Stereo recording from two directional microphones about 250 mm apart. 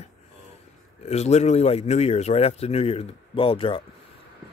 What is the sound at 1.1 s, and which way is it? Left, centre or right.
Speech, left.